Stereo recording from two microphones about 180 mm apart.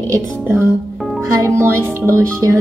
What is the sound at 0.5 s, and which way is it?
Speech, 15° right (ahead or behind).